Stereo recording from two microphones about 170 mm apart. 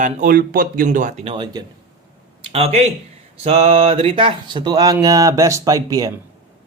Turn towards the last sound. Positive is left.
turn(degrees=-20)  # may be behind; listen again after turning